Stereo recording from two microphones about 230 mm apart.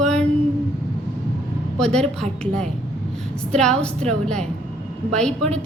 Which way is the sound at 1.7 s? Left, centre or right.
Centre.